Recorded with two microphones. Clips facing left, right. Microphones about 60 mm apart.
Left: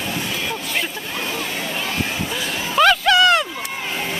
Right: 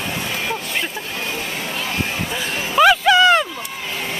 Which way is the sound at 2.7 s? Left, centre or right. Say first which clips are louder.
Right 2 dB; centre.